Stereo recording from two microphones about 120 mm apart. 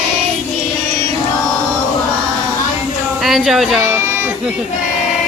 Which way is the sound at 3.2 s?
Centre (ahead or behind).